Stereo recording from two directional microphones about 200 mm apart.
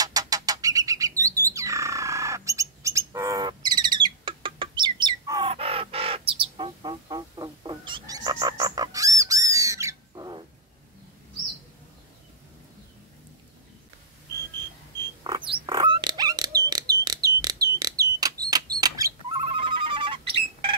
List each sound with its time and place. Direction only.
0.0 s bird: 20° right (ahead or behind)
15.2 s a sound: 25° right (ahead or behind)
19.3 s telephone bell ringing: 25° right (ahead or behind)